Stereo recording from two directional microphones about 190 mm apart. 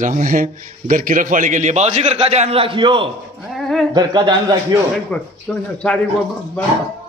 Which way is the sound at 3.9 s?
20° right (ahead or behind).